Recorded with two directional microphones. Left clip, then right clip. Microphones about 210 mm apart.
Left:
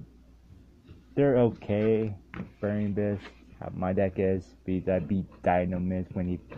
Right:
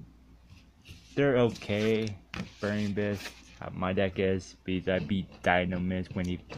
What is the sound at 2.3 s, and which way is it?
Speech, 10° right (ahead or behind).